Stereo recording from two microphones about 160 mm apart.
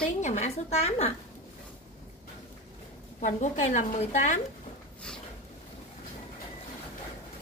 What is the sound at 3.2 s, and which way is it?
Speech, 50° left (ahead or behind).